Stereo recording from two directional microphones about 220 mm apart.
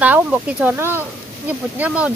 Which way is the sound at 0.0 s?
5° right (ahead or behind).